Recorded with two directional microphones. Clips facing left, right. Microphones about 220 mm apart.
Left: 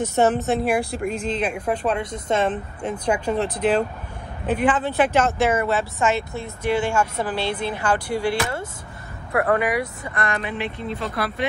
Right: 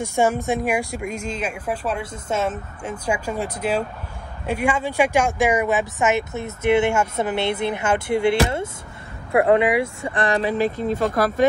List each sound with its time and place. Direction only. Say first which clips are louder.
0.0 s speech: left 1 dB; 10° right (ahead or behind); by 11.4 s 45° right (ahead or behind)